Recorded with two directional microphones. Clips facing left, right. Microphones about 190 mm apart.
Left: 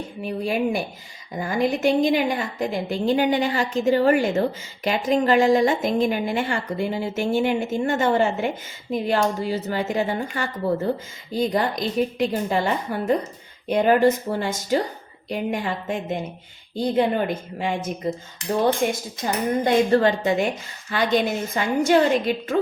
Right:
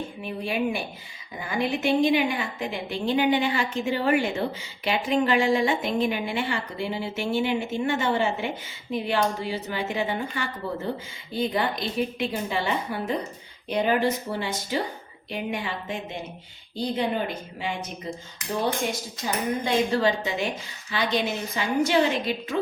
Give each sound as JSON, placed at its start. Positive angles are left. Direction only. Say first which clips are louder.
{"t": 0.2, "sound": "a woman's voice", "louder": "left 5 dB", "side_deg": 40}